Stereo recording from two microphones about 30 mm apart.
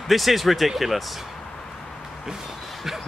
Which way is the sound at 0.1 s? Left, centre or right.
Centre.